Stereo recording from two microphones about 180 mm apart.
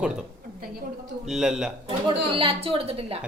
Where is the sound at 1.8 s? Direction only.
30° right (ahead or behind).